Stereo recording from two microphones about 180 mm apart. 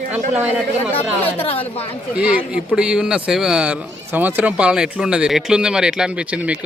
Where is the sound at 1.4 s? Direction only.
35° left (ahead or behind).